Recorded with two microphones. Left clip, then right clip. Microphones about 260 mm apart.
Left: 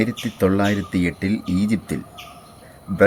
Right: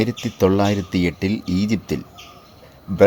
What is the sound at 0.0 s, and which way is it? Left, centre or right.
Speech, centre.